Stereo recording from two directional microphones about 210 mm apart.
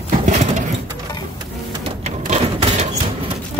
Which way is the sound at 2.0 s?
30° right (ahead or behind).